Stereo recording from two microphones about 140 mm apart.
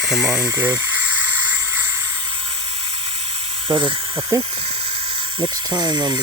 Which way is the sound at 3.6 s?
35° right (ahead or behind).